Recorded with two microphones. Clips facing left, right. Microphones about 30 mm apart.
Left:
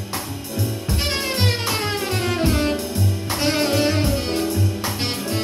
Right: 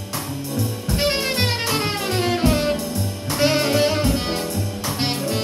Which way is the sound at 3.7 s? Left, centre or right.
Centre.